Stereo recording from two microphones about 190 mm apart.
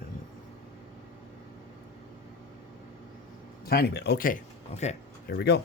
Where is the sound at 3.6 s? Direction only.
55° left (ahead or behind).